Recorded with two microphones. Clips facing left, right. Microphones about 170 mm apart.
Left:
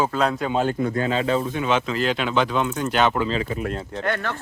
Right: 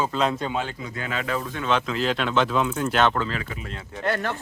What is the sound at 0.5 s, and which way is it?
Speech, 45° left (ahead or behind).